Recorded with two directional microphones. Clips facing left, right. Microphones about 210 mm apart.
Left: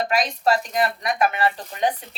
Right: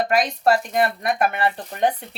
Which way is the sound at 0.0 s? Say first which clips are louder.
Right 2 dB; 55° right (ahead or behind).